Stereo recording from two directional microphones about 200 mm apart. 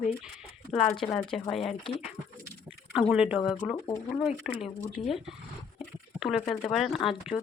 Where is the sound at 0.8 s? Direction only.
5° left (ahead or behind).